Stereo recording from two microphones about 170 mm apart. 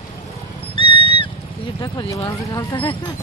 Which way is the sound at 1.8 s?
25° left (ahead or behind).